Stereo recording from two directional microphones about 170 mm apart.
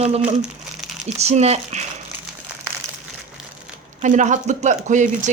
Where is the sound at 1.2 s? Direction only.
40° right (ahead or behind).